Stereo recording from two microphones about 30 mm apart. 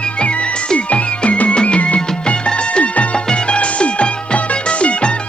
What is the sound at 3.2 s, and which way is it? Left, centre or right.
Music, left.